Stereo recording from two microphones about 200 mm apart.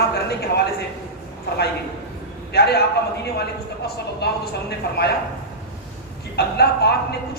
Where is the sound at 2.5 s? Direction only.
55° left (ahead or behind).